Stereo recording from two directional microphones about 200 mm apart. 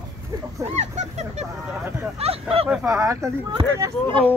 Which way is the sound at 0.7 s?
35° right (ahead or behind).